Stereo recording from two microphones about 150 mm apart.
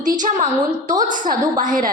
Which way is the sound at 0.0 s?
60° right (ahead or behind).